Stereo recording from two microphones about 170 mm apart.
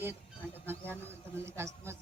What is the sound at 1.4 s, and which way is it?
Speech, 15° right (ahead or behind).